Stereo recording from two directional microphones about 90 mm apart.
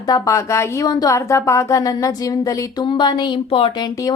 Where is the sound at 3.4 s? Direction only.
85° left.